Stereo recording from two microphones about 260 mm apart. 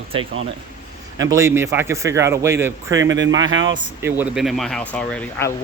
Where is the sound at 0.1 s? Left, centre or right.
Right.